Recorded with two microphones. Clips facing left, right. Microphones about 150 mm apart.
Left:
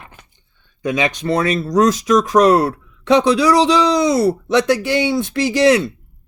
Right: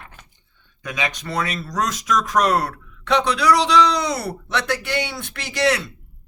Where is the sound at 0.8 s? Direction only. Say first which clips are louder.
Left 9 dB; 30° left (ahead or behind).